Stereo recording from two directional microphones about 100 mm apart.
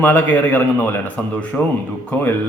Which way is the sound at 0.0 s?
20° left (ahead or behind).